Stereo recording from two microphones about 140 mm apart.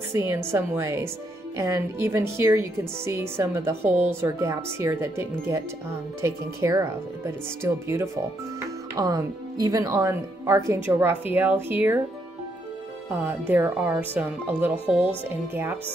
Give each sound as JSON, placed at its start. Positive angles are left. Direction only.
{"t": 0.3, "sound": "speech", "side_deg": -15}
{"t": 13.1, "sound": "speech", "side_deg": -15}